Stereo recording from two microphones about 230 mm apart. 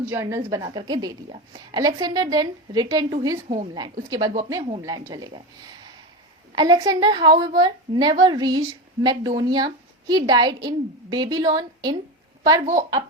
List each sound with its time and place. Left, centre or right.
0.0 s a woman's voice: centre; by 3.7 s right
3.8 s a woman's voice: centre
6.6 s a woman's voice: centre